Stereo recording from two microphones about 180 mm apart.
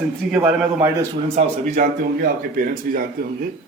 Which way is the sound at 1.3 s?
45° right (ahead or behind).